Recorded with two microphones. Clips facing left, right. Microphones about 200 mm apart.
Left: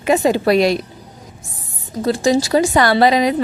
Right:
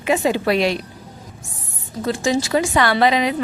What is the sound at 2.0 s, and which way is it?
Speech, 35° left (ahead or behind).